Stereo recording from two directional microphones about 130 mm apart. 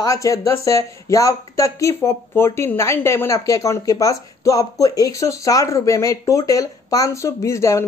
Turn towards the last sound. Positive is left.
turn(degrees=25)  # may be behind; listen again after turning